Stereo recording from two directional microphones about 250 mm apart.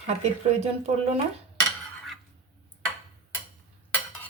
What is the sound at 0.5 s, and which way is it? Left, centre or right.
Speech, right.